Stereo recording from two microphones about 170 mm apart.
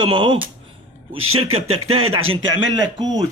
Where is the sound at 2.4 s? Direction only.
25° right (ahead or behind).